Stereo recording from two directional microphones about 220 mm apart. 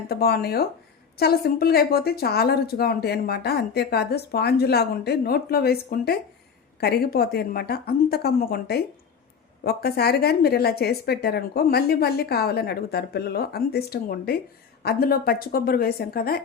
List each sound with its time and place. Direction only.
0.1 s speech: 45° left (ahead or behind)